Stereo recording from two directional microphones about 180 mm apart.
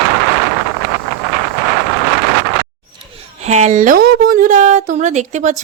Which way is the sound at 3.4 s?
40° right (ahead or behind).